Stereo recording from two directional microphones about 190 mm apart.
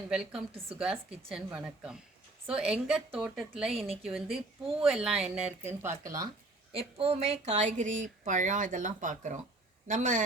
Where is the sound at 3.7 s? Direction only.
30° right (ahead or behind).